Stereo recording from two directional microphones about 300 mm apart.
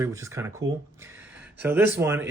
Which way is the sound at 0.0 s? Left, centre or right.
Centre.